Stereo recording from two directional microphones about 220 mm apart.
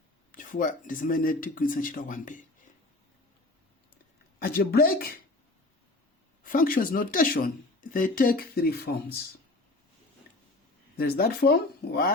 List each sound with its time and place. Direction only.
0.3 s speech: 40° left (ahead or behind)
4.4 s speech: 45° left (ahead or behind)
6.4 s speech: 40° left (ahead or behind)
10.9 s speech: 45° left (ahead or behind)